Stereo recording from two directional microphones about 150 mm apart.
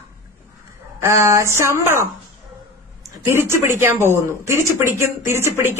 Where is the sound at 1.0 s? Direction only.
20° right (ahead or behind).